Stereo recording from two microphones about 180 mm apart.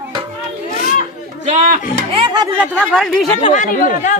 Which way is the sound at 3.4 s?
30° left (ahead or behind).